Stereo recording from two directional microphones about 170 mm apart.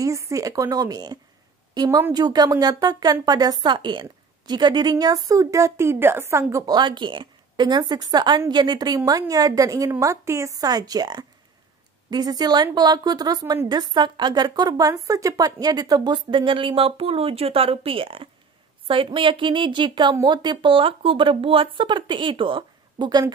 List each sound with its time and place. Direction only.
0.0 s speech: 20° right (ahead or behind)